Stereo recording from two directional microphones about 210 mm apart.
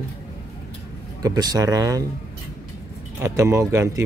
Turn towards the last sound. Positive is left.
turn(degrees=-15)  # may be behind; listen again after turning